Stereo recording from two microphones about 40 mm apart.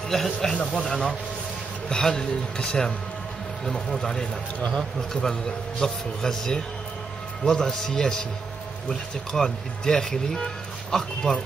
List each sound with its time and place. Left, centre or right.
0.1 s speech: centre
1.9 s speech: centre